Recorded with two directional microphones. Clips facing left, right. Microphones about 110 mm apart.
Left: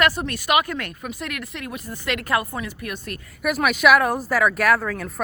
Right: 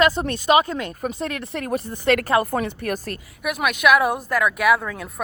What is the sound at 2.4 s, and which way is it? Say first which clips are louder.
Speech: right 7 dB; 55° right (ahead or behind).